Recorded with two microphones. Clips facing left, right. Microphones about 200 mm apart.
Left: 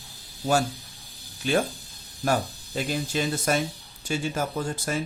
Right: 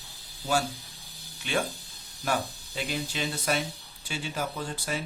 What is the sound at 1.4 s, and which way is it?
Speech, 40° left (ahead or behind).